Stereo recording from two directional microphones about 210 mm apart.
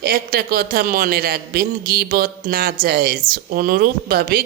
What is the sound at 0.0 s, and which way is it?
Speech, 45° right (ahead or behind).